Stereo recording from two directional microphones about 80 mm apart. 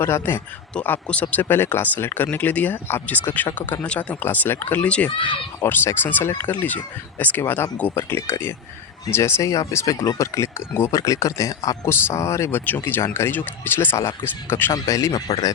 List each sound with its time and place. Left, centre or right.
0.0 s speech: left
1.0 s speech: centre
5.1 s speech: left
5.5 s speech: left
11.9 s speech: left
14.7 s speech: left